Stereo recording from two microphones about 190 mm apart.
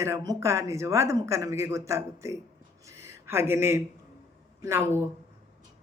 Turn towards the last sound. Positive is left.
turn(degrees=-15)  # may be behind; listen again after turning